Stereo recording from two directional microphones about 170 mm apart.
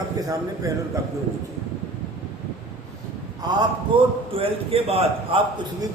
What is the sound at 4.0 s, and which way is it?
A man's voice, 35° right (ahead or behind).